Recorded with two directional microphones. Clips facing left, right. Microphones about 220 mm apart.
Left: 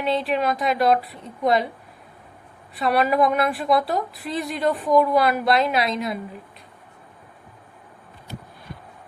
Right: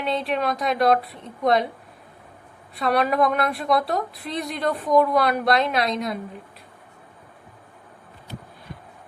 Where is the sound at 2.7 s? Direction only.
Centre (ahead or behind).